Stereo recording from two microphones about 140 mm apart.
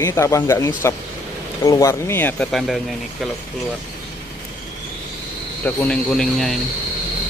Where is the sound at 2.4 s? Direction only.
Centre (ahead or behind).